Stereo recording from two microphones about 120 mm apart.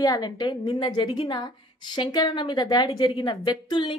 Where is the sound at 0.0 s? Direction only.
35° left (ahead or behind).